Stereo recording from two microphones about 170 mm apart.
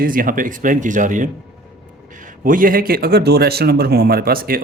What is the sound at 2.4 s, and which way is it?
Speech, 55° right (ahead or behind).